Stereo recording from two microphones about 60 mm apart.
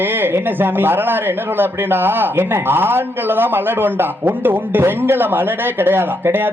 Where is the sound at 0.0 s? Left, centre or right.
Right.